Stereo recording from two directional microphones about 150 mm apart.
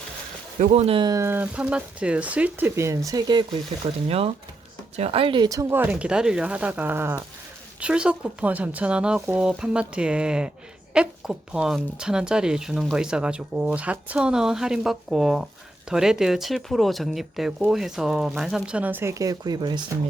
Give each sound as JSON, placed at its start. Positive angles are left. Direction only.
{"t": 0.6, "sound": "speech", "side_deg": -50}
{"t": 1.1, "sound": "speech", "side_deg": -15}
{"t": 3.8, "sound": "speech", "side_deg": -40}